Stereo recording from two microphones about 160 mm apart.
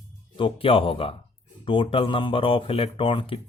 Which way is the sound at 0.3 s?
35° left (ahead or behind).